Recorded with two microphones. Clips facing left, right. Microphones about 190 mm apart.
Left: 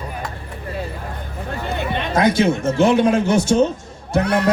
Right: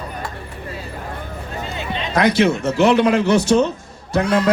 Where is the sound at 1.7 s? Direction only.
60° left (ahead or behind).